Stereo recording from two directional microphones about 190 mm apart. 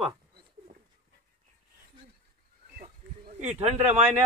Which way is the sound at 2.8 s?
35° right (ahead or behind).